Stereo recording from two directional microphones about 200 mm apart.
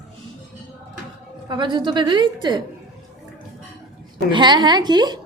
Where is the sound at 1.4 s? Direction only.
20° right (ahead or behind).